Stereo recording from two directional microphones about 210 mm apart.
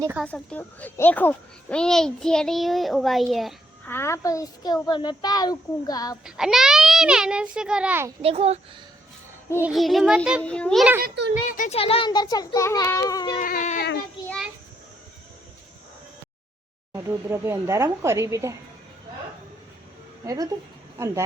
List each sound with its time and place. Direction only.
0.0 s speech: 10° right (ahead or behind)
0.3 s a child's voice: 5° left (ahead or behind)
3.9 s a child's voice: 10° left (ahead or behind)
6.2 s a child's voice: 5° right (ahead or behind)
8.2 s speech: 30° right (ahead or behind)
9.6 s a child's voice: centre (ahead or behind)
11.0 s a child's voice: 55° right (ahead or behind)
11.5 s a child's voice: 35° left (ahead or behind); by 13.4 s 20° left (ahead or behind)
13.4 s speech: 40° left (ahead or behind)
16.9 s speech: 10° right (ahead or behind)
20.2 s speech: 15° right (ahead or behind)